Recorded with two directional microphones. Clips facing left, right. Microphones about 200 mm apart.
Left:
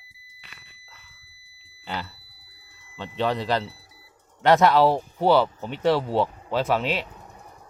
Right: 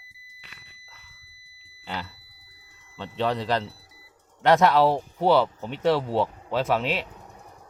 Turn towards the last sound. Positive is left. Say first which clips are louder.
# left 1 dB
turn(degrees=0)  # may be behind; listen again after turning